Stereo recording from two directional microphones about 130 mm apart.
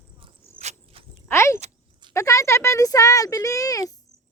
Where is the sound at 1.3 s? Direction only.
20° left (ahead or behind).